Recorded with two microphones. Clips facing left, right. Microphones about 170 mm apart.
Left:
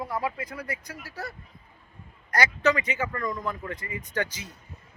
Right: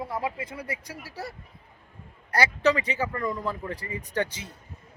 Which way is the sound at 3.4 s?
30° right (ahead or behind).